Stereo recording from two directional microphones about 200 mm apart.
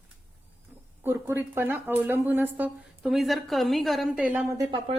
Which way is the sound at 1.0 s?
10° right (ahead or behind).